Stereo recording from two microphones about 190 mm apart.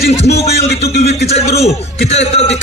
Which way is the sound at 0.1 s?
35° left (ahead or behind).